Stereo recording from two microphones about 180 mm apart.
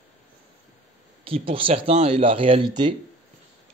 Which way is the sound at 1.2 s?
30° right (ahead or behind).